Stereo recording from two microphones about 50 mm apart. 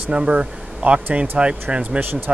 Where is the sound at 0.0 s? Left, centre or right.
Centre.